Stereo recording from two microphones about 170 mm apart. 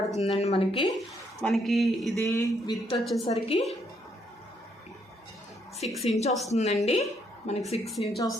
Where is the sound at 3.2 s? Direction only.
35° left (ahead or behind).